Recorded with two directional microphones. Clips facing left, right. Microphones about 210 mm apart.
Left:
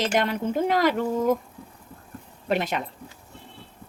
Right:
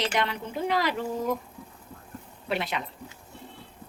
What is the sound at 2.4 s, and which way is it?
Speech, 45° left (ahead or behind).